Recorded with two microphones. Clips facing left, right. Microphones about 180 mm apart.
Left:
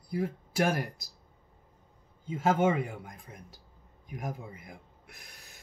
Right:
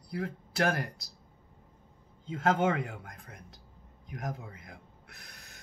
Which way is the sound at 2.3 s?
5° left (ahead or behind).